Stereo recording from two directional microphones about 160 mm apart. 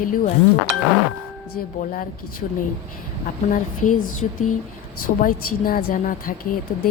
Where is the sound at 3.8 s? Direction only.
55° left (ahead or behind).